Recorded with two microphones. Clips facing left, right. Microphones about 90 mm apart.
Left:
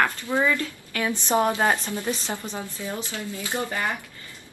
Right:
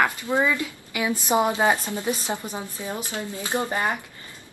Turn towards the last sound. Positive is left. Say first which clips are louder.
# right 3 dB
turn(degrees=-20)  # may be behind; listen again after turning